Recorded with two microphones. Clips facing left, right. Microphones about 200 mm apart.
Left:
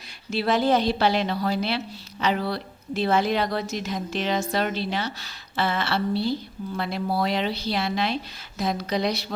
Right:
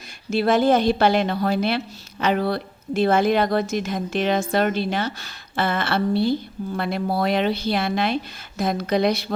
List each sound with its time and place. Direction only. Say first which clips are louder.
0.3 s a woman's voice: right 4 dB; 50° right (ahead or behind)